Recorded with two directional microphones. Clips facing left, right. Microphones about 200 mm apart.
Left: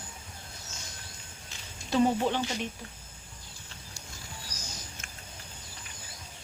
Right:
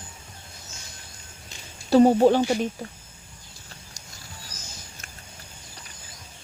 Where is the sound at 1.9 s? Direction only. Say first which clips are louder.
Right 10 dB; 40° right (ahead or behind).